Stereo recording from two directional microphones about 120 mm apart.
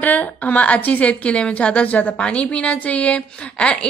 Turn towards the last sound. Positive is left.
turn(degrees=10)  # may be behind; listen again after turning